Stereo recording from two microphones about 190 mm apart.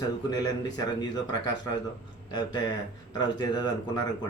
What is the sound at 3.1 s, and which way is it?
Speech, 20° left (ahead or behind).